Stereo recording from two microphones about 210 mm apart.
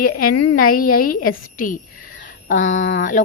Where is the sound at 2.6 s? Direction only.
65° left (ahead or behind).